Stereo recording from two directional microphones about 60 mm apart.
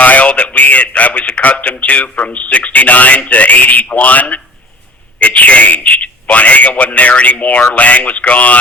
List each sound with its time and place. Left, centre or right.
0.0 s speech: left